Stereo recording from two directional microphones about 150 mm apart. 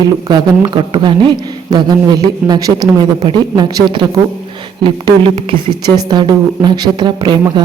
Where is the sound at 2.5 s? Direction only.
25° right (ahead or behind).